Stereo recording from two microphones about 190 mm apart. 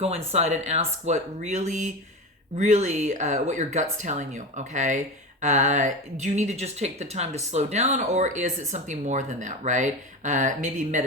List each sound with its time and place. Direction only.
0.3 s speech: 35° right (ahead or behind)